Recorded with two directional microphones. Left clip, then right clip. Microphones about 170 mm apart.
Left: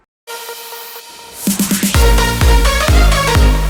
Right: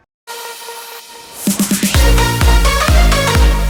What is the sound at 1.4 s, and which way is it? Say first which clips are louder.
Music: even; centre (ahead or behind).